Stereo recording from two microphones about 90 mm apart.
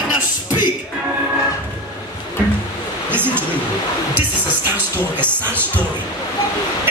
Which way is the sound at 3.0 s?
20° right (ahead or behind).